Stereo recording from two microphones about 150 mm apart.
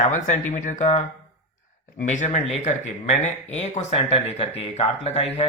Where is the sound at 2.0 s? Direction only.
55° left (ahead or behind).